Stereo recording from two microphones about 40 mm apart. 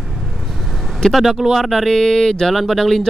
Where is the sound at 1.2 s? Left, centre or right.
Centre.